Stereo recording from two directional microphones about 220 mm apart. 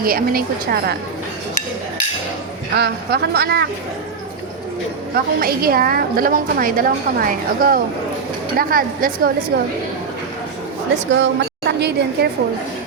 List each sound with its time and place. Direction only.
0.0 s a woman's voice: 40° right (ahead or behind)
2.7 s a woman's voice: 50° right (ahead or behind)
5.1 s a woman's voice: 45° right (ahead or behind)
11.1 s a woman's voice: 50° right (ahead or behind)